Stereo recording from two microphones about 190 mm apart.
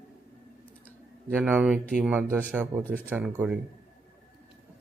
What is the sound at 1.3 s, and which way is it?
Speech, 10° right (ahead or behind).